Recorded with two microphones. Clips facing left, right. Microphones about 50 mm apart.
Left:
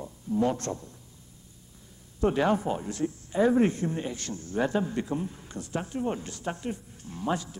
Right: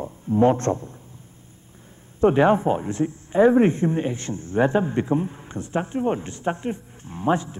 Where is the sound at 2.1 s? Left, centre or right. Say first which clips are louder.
Right 8 dB; right.